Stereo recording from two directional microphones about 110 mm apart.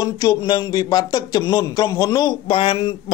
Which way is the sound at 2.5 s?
55° left (ahead or behind).